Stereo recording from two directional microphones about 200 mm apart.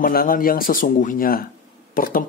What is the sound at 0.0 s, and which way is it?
Speech, 45° left (ahead or behind).